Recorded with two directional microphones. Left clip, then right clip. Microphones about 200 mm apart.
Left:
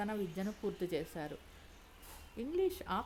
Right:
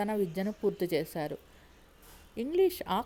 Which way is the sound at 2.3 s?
30° right (ahead or behind).